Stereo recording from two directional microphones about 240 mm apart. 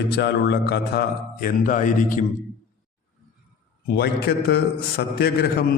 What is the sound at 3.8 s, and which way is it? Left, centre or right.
A man's voice, left.